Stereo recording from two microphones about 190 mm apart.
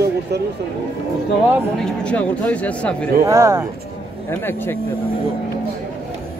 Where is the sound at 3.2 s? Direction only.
15° right (ahead or behind).